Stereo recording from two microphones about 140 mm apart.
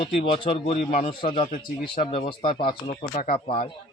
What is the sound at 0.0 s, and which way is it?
Speech, 45° left (ahead or behind).